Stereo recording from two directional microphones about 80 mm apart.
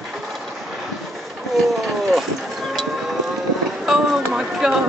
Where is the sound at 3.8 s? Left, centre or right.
Centre.